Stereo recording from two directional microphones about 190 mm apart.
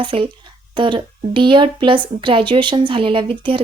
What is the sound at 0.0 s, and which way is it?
Speech, 25° right (ahead or behind).